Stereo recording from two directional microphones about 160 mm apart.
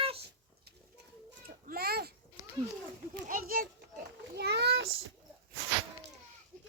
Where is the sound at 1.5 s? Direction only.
65° right (ahead or behind).